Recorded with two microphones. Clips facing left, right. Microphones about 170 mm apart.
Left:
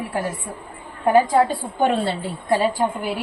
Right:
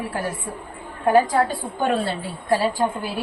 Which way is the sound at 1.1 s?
20° left (ahead or behind).